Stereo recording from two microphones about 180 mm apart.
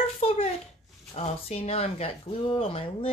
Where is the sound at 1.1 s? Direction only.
35° left (ahead or behind).